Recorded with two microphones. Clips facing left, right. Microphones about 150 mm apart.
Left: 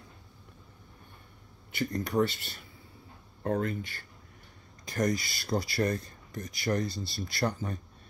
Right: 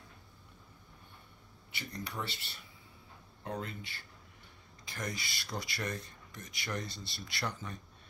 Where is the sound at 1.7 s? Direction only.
45° left (ahead or behind).